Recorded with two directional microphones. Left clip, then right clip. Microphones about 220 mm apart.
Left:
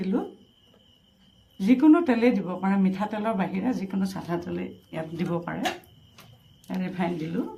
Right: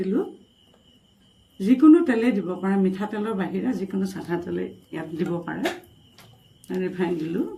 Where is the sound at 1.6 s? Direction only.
40° left (ahead or behind).